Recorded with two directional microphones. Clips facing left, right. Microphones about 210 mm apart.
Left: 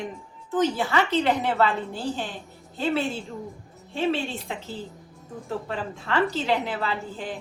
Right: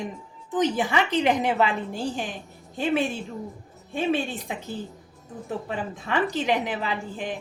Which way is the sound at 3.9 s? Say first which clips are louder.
Right 1 dB; 15° right (ahead or behind).